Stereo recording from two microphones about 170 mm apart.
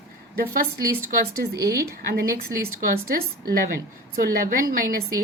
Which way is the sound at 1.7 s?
65° right (ahead or behind).